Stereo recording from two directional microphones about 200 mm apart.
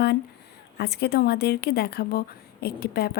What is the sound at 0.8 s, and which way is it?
Speech, 55° left (ahead or behind).